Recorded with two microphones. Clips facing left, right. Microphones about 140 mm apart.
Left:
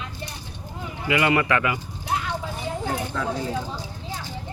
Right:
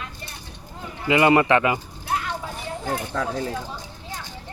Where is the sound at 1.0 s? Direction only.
30° right (ahead or behind).